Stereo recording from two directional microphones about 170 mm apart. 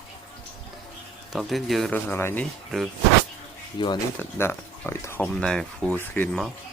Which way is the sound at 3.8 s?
30° left (ahead or behind).